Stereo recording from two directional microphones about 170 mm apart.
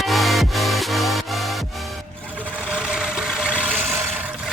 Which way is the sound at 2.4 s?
5° right (ahead or behind).